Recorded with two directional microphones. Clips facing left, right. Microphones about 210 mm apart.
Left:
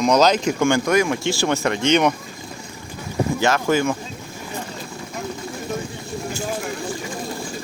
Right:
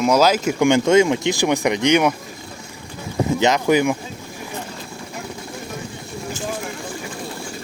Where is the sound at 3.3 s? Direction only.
20° right (ahead or behind).